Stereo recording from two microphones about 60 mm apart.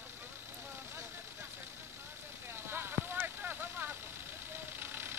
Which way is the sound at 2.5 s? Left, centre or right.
Right.